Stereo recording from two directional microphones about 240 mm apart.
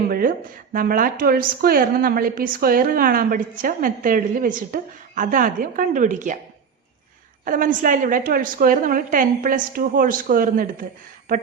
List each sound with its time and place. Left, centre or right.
0.1 s speech: right
7.4 s speech: right